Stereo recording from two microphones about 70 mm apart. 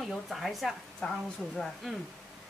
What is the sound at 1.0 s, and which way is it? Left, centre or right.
Speech, centre.